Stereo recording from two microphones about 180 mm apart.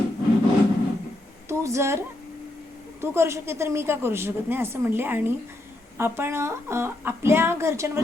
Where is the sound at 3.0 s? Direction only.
15° right (ahead or behind).